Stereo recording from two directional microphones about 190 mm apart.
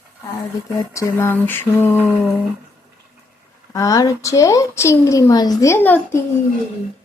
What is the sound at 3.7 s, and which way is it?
Speech, 20° left (ahead or behind).